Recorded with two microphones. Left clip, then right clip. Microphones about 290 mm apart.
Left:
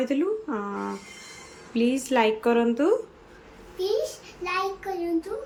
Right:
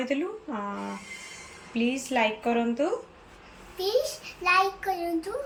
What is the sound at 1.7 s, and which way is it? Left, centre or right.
A child's voice, centre.